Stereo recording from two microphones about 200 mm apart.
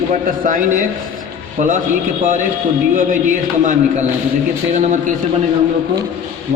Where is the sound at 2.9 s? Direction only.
40° right (ahead or behind).